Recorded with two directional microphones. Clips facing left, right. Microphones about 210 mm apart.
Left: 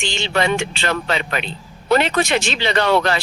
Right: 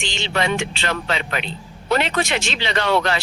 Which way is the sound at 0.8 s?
45° left (ahead or behind).